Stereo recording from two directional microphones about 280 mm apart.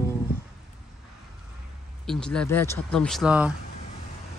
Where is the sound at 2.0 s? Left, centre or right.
Centre.